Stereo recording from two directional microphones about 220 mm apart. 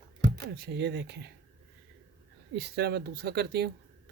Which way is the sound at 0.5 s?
50° right (ahead or behind).